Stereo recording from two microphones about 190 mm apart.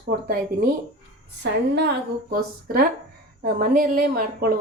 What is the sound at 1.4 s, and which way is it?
A woman's voice, 60° right (ahead or behind).